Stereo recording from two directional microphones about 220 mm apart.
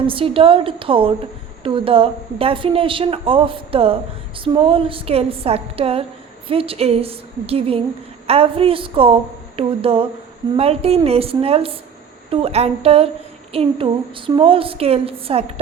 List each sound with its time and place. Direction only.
0.1 s a woman's voice: 25° right (ahead or behind)